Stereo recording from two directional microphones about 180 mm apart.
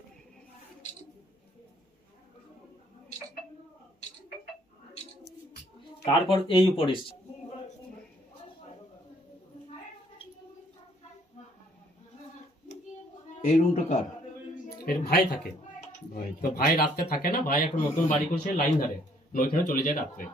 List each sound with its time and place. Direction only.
6.1 s speech: 30° left (ahead or behind)
13.4 s speech: 45° left (ahead or behind)
14.8 s speech: 60° left (ahead or behind)